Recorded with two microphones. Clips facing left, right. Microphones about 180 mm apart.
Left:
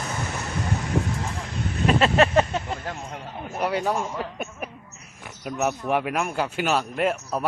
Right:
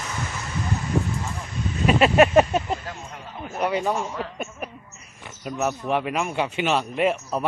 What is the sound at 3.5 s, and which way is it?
Speech, centre (ahead or behind).